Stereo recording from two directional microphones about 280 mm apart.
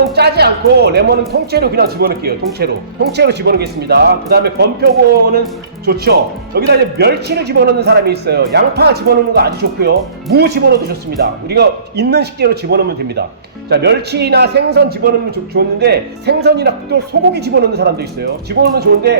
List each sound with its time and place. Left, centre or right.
0.2 s speech: right